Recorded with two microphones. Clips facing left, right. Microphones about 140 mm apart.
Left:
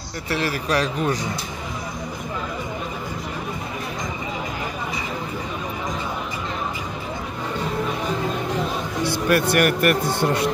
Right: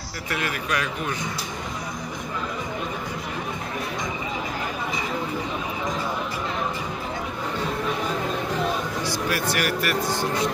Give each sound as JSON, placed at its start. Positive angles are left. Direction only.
{"t": 0.3, "sound": "speech", "side_deg": 30}
{"t": 9.0, "sound": "speech", "side_deg": 60}